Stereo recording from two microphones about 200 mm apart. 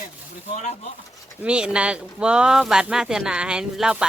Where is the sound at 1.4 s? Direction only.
5° right (ahead or behind).